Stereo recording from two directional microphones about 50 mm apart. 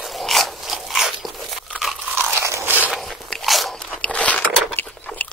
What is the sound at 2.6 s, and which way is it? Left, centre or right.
Walk, right.